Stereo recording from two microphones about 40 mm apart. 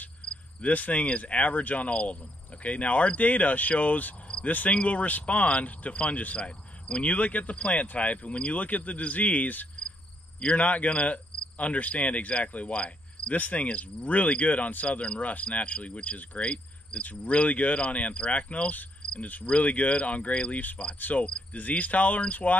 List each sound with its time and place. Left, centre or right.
0.2 s cricket: left
0.7 s speech: left
10.4 s cricket: left
13.4 s speech: left
13.7 s speech: left